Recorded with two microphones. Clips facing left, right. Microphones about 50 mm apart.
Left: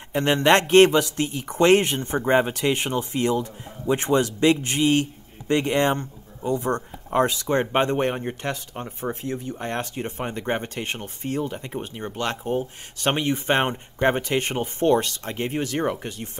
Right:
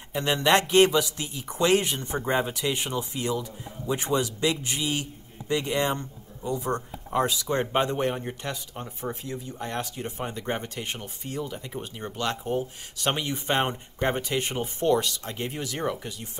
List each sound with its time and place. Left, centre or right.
0.1 s speech: left